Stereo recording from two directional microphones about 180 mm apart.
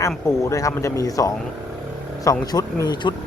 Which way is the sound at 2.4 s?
20° left (ahead or behind).